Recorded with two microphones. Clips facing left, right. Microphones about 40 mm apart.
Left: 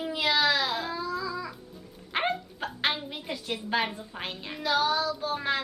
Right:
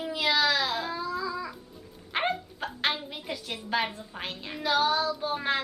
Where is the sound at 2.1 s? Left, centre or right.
Centre.